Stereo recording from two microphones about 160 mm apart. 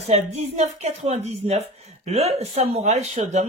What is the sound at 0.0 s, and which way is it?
Speech, 40° right (ahead or behind).